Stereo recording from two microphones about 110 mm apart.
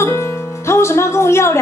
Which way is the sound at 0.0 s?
25° left (ahead or behind).